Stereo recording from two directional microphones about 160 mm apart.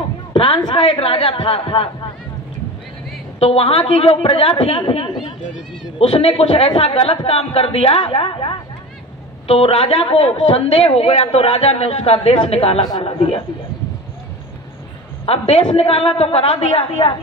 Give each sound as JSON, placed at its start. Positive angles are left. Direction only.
{"t": 0.3, "sound": "a man's voice", "side_deg": 30}
{"t": 3.3, "sound": "a man's voice", "side_deg": 35}
{"t": 15.2, "sound": "a man's voice", "side_deg": 40}